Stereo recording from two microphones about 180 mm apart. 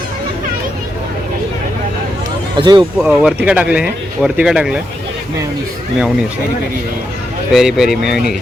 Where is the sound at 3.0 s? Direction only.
5° right (ahead or behind).